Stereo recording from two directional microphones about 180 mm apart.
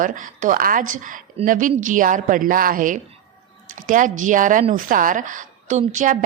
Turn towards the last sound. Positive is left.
turn(degrees=-45)  # may be behind; listen again after turning